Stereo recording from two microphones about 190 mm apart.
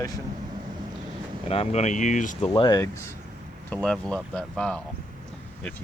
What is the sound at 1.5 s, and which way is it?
Speech, 35° left (ahead or behind).